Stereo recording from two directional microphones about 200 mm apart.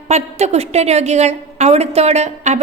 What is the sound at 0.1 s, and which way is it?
A woman's voice, 35° right (ahead or behind).